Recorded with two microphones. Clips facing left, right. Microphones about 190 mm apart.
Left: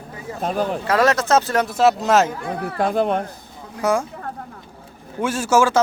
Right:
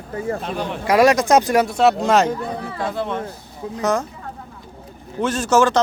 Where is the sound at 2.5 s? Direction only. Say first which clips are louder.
Left 3 dB; 55° left (ahead or behind).